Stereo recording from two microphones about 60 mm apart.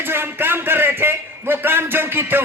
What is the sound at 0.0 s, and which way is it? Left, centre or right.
A man's voice, right.